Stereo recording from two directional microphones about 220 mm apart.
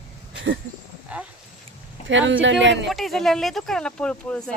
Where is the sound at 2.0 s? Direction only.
60° right (ahead or behind).